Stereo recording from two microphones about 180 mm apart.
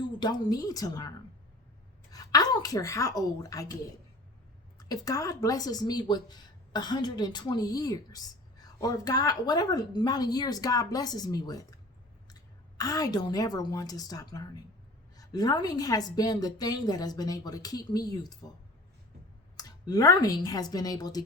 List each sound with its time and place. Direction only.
0.2 s speech: 25° left (ahead or behind)
2.1 s speech: 20° left (ahead or behind)
4.8 s a woman's voice: 20° left (ahead or behind)
19.5 s a woman's voice: 20° left (ahead or behind)